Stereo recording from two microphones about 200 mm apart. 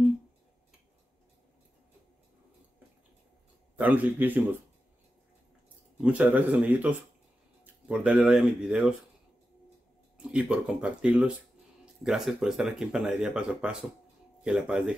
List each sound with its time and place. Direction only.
3.7 s speech: 10° right (ahead or behind)
5.9 s speech: 5° right (ahead or behind)
10.1 s speech: 5° right (ahead or behind)